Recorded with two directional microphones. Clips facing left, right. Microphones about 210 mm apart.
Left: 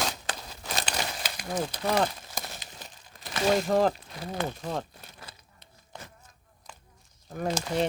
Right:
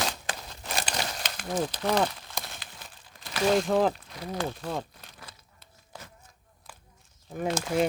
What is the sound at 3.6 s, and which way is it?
Speech, centre (ahead or behind).